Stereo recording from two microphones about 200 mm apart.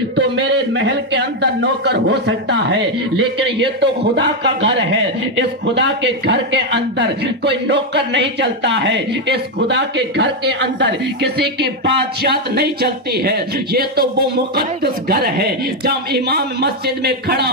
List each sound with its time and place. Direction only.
0.1 s speech: 60° right (ahead or behind)